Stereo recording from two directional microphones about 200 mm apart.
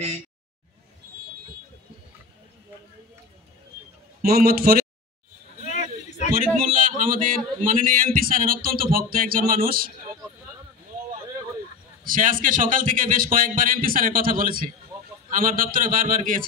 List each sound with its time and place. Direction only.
4.2 s speech: 50° right (ahead or behind)
5.6 s a sound: 35° left (ahead or behind)
6.3 s speech: 45° right (ahead or behind)
12.0 s speech: 40° right (ahead or behind)